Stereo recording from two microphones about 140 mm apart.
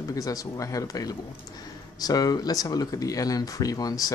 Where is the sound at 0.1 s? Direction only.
25° left (ahead or behind).